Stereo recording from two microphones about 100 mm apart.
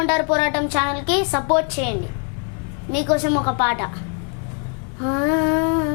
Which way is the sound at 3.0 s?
15° left (ahead or behind).